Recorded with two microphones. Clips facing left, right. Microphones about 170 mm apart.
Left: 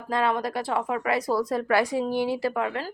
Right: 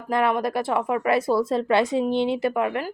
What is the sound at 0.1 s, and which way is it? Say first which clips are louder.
Speech: right 3 dB; 25° right (ahead or behind).